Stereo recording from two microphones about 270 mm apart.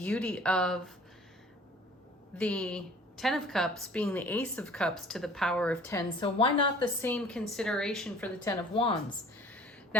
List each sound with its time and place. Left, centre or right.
0.0 s a woman's voice: centre
2.4 s a woman's voice: centre
7.0 s a woman's voice: centre
8.7 s a woman's voice: left
9.4 s a sound: centre